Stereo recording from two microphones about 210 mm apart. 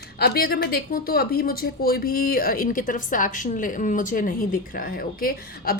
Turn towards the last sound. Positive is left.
turn(degrees=45)  # may be behind; listen again after turning